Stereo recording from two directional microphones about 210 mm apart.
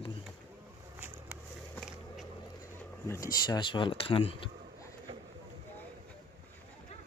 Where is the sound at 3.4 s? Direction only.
20° left (ahead or behind).